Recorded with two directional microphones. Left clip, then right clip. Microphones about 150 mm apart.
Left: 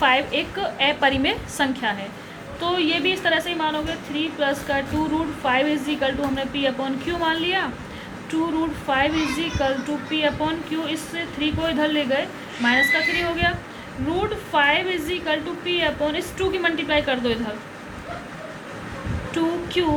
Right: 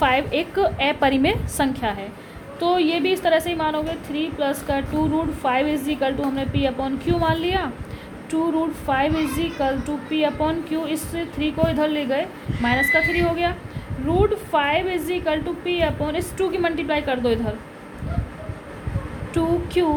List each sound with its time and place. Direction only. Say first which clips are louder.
0.0 s a woman's voice: even; 90° right
8.9 s a woman's voice: even; 90° right
19.3 s a woman's voice: right 2 dB; 90° right